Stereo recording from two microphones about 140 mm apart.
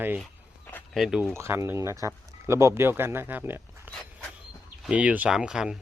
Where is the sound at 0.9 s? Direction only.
5° right (ahead or behind).